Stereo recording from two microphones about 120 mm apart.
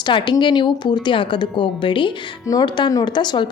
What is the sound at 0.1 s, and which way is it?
Speech, 40° left (ahead or behind).